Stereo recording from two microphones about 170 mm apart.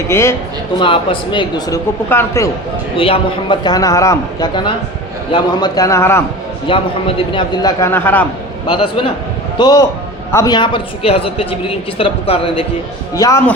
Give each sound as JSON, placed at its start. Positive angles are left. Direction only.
{"t": 0.1, "sound": "a man's voice", "side_deg": 15}
{"t": 0.8, "sound": "a man's voice", "side_deg": 30}
{"t": 3.0, "sound": "a man's voice", "side_deg": 30}
{"t": 6.7, "sound": "speech", "side_deg": 30}
{"t": 7.3, "sound": "a man's voice", "side_deg": 20}
{"t": 8.6, "sound": "a man's voice", "side_deg": 30}
{"t": 13.1, "sound": "a man's voice", "side_deg": 20}